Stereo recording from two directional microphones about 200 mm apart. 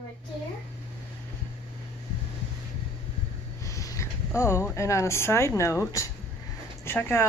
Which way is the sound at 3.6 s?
15° left (ahead or behind).